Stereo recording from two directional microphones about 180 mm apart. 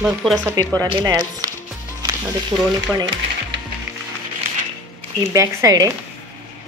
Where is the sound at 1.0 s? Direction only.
15° right (ahead or behind).